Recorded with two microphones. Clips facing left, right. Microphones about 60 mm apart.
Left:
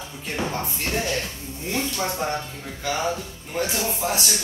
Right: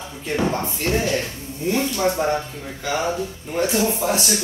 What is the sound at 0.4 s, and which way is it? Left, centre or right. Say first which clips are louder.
Speech: right 4 dB; right.